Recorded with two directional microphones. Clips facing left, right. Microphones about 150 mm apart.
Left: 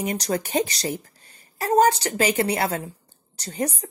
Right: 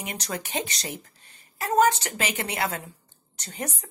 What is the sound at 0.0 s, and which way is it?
Speech, 35° left (ahead or behind).